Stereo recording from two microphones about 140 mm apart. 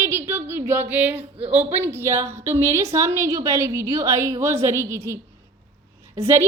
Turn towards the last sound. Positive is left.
turn(degrees=-20)  # may be behind; listen again after turning